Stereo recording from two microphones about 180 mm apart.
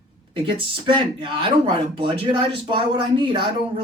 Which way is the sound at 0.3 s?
30° right (ahead or behind).